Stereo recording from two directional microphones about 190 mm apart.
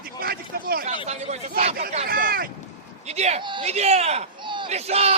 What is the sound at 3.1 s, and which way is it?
A man's voice, 35° right (ahead or behind).